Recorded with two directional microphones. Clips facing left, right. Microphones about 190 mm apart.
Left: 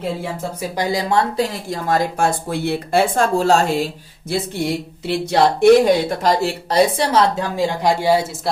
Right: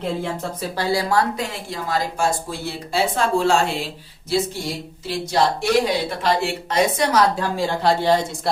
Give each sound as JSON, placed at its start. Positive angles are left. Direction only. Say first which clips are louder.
{"t": 0.0, "sound": "speech", "louder": "left 1 dB", "side_deg": 5}
{"t": 1.4, "sound": "speech", "louder": "left 6 dB", "side_deg": 45}
{"t": 4.3, "sound": "a sound", "louder": "right 1 dB", "side_deg": 55}
{"t": 5.0, "sound": "speech", "louder": "left 4 dB", "side_deg": 60}
{"t": 7.5, "sound": "speech", "louder": "left 2 dB", "side_deg": 15}